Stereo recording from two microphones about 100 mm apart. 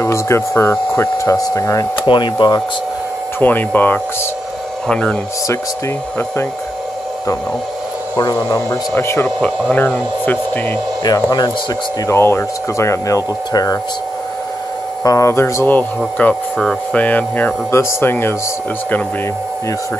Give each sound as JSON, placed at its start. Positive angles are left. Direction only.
{"t": 0.0, "sound": "speech", "side_deg": 25}
{"t": 2.0, "sound": "speech", "side_deg": 50}
{"t": 3.3, "sound": "speech", "side_deg": 20}
{"t": 8.5, "sound": "speech", "side_deg": 35}
{"t": 8.9, "sound": "speech", "side_deg": 25}
{"t": 9.4, "sound": "speech", "side_deg": 10}
{"t": 11.1, "sound": "speech", "side_deg": 40}
{"t": 12.1, "sound": "speech", "side_deg": 25}
{"t": 15.0, "sound": "speech", "side_deg": 30}
{"t": 16.5, "sound": "speech", "side_deg": 5}
{"t": 17.0, "sound": "speech", "side_deg": 15}
{"t": 17.6, "sound": "speech", "side_deg": 25}